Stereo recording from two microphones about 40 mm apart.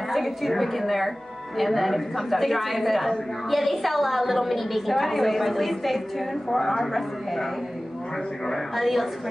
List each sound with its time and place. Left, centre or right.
0.1 s a woman's voice: centre
8.5 s a woman's voice: centre